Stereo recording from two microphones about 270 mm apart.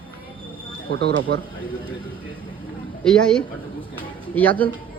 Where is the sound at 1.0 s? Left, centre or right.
Right.